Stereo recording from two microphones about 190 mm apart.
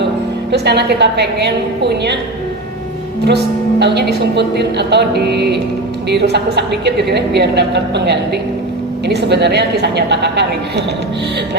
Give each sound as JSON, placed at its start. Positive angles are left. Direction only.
{"t": 0.5, "sound": "a woman's voice", "side_deg": -60}
{"t": 3.2, "sound": "a woman's voice", "side_deg": -60}